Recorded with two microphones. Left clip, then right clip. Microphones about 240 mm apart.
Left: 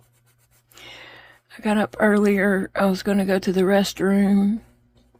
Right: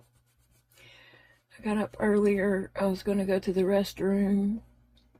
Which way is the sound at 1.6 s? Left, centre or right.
Left.